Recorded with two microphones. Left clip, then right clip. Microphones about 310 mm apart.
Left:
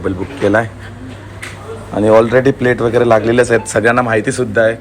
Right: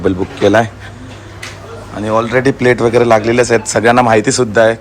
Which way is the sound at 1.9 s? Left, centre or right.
Centre.